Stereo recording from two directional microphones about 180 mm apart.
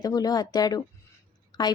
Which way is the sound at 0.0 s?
20° left (ahead or behind).